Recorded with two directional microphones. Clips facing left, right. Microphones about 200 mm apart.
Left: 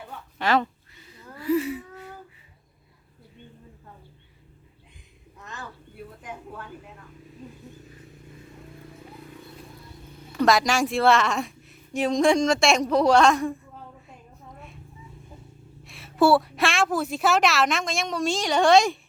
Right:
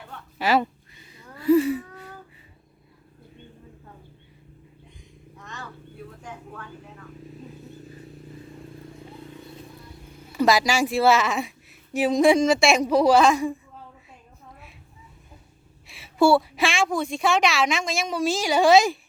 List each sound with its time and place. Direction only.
0.3 s speech: 5° right (ahead or behind)
1.5 s a sound: 30° right (ahead or behind)
5.4 s cat: 5° left (ahead or behind)
6.2 s a sound: 5° left (ahead or behind)
10.2 s a woman's voice: 5° right (ahead or behind)
15.9 s a woman's voice: centre (ahead or behind)